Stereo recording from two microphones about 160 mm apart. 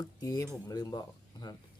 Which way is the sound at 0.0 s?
20° left (ahead or behind).